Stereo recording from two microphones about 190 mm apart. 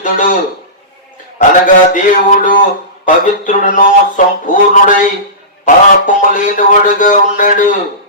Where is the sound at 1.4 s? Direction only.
45° left (ahead or behind).